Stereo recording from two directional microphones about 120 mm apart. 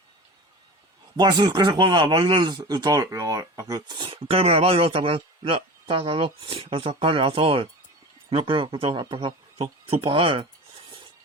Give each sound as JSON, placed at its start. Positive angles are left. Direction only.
{"t": 1.1, "sound": "speech", "side_deg": -35}